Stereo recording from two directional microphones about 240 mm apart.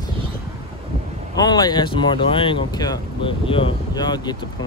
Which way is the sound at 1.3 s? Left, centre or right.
Centre.